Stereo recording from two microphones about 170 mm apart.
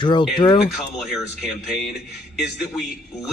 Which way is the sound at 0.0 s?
30° left (ahead or behind).